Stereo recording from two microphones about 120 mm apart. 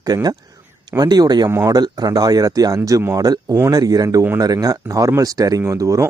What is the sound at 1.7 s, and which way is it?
Speech, 35° right (ahead or behind).